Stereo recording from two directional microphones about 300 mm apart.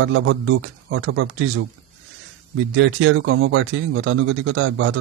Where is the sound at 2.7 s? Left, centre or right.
Right.